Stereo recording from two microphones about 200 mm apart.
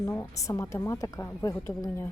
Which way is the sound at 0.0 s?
15° left (ahead or behind).